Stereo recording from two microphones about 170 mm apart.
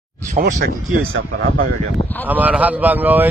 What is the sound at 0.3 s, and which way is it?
Speech, 50° right (ahead or behind).